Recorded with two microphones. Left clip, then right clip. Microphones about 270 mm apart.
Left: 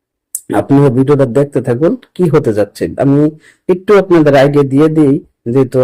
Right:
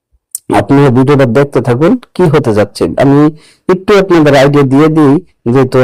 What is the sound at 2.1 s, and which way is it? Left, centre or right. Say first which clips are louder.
Speech: right 3 dB; right.